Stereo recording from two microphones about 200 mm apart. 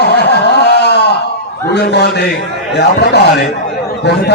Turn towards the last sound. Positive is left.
turn(degrees=55)  # may be behind; listen again after turning